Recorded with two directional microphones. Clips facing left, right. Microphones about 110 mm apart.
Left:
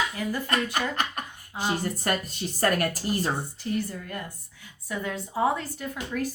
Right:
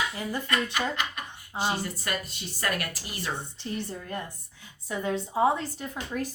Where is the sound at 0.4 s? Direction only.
40° left (ahead or behind).